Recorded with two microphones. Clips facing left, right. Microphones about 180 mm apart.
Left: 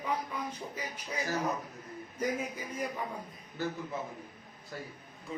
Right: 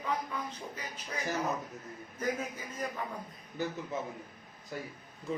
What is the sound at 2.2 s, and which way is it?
Speech, 10° left (ahead or behind).